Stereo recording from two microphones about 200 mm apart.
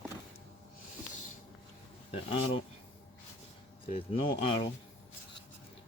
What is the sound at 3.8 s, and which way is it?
Speech, 30° left (ahead or behind).